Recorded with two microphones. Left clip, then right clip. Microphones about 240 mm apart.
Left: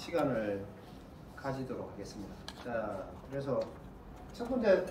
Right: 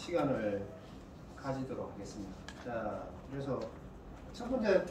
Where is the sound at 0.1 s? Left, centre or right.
Centre.